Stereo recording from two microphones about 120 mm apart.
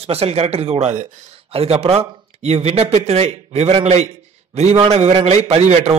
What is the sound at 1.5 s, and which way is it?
A man's voice, 55° right (ahead or behind).